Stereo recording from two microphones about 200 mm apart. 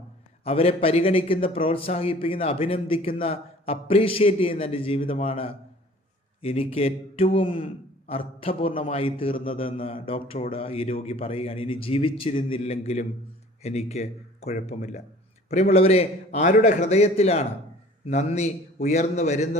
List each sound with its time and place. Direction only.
0.4 s a man's voice: 30° left (ahead or behind)